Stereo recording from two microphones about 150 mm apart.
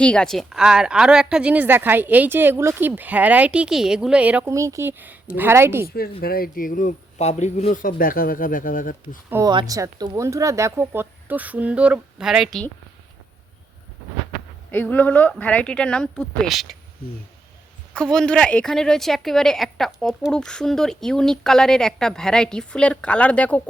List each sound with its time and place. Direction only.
0.0 s speech: 5° left (ahead or behind); by 5.9 s 15° right (ahead or behind)
5.9 s speech: 90° left; by 9.0 s 65° left (ahead or behind)
9.5 s speech: 25° right (ahead or behind); by 12.6 s centre (ahead or behind)
14.7 s speech: 10° left (ahead or behind)
17.9 s a woman's voice: 5° left (ahead or behind)